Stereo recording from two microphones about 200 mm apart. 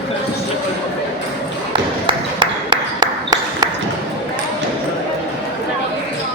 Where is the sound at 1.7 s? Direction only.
25° right (ahead or behind).